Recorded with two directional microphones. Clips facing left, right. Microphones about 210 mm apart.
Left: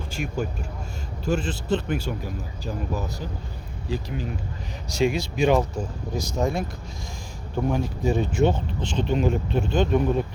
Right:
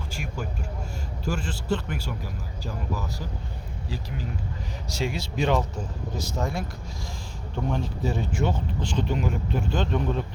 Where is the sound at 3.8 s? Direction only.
20° left (ahead or behind).